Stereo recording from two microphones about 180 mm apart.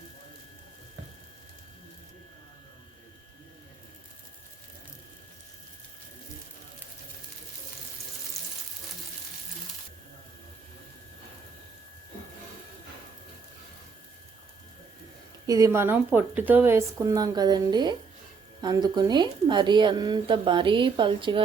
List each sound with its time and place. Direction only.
15.4 s a woman's voice: 20° right (ahead or behind)